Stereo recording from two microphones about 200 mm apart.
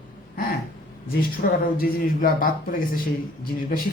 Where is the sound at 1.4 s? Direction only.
50° left (ahead or behind).